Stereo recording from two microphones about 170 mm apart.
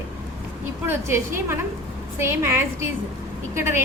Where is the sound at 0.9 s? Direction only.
15° right (ahead or behind).